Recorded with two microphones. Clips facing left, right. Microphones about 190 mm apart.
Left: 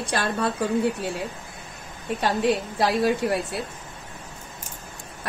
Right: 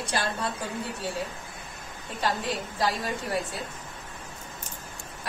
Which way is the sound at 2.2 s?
70° left (ahead or behind).